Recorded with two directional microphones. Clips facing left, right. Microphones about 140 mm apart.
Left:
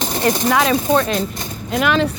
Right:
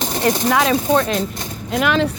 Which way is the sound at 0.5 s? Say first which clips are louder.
Even; 30° right (ahead or behind).